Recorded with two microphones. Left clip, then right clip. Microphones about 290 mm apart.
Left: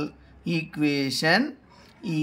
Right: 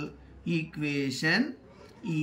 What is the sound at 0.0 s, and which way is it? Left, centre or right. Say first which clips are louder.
Speech: left 6 dB; centre.